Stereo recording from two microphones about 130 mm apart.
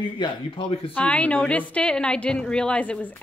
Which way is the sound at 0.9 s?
10° left (ahead or behind).